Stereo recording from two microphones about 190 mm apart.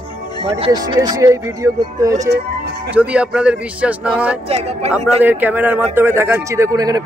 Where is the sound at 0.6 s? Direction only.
30° right (ahead or behind).